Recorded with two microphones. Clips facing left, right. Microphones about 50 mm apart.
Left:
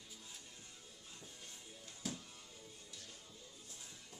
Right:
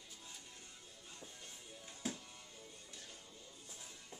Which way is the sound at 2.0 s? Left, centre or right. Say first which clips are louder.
Right 2 dB; right.